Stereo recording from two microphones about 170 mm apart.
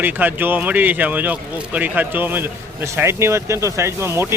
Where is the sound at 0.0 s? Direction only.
10° right (ahead or behind).